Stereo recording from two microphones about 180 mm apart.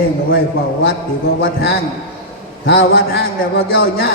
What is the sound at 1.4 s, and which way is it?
A man's voice, 55° left (ahead or behind).